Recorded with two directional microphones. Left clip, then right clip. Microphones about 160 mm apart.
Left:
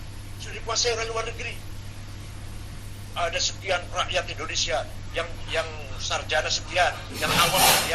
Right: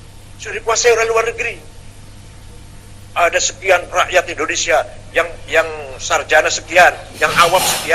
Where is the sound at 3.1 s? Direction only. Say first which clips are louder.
Right 12 dB; 45° right (ahead or behind).